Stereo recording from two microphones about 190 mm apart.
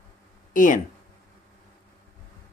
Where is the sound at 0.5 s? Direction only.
40° left (ahead or behind).